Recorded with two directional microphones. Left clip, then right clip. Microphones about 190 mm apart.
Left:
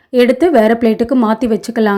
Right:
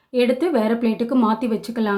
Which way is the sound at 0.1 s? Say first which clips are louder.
Left 9 dB; 35° left (ahead or behind).